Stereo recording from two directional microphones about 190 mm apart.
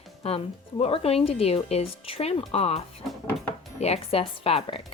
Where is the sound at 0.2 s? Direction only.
30° left (ahead or behind).